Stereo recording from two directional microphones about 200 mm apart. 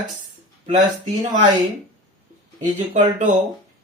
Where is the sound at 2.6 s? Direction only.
40° right (ahead or behind).